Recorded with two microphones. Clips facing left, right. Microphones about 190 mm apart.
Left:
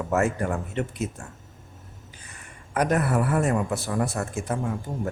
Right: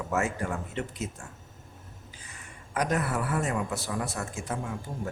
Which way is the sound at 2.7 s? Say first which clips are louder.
Left 5 dB; 55° left (ahead or behind).